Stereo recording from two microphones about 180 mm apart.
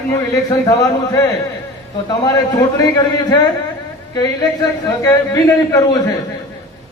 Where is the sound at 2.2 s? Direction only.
20° left (ahead or behind).